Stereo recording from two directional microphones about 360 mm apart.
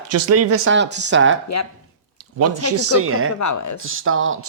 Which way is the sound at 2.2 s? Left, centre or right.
Right.